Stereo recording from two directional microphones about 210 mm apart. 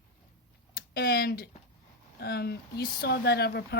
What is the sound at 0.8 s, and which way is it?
Speech, 45° left (ahead or behind).